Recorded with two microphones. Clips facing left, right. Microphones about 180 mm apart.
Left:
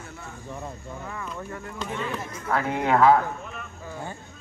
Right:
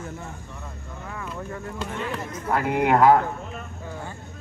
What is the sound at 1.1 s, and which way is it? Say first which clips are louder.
Speech: right 3 dB; 5° right (ahead or behind).